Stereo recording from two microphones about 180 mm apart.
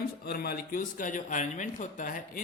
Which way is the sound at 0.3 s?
60° left (ahead or behind).